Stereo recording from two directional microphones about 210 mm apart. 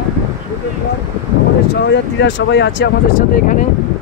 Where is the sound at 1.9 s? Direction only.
60° left (ahead or behind).